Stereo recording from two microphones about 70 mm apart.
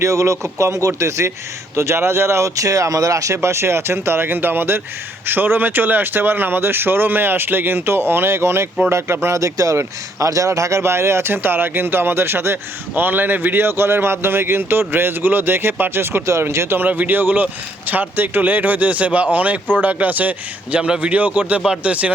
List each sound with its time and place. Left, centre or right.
0.0 s speech: right
16.2 s speech: right; by 22.1 s centre